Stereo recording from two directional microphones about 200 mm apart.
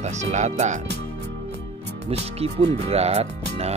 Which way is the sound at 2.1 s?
30° right (ahead or behind).